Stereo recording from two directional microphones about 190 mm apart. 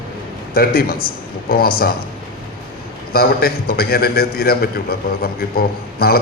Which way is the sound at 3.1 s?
55° left (ahead or behind).